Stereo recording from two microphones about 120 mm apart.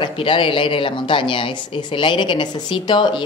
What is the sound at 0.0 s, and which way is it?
A woman's voice, 45° left (ahead or behind).